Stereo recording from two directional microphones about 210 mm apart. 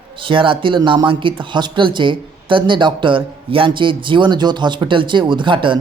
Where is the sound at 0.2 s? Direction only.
25° right (ahead or behind).